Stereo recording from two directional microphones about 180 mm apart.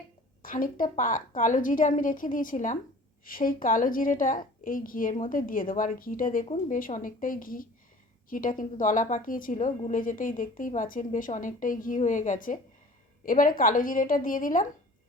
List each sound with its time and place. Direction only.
0.4 s a woman's voice: 50° left (ahead or behind)